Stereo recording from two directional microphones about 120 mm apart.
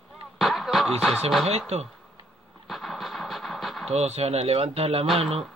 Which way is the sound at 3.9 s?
65° right (ahead or behind).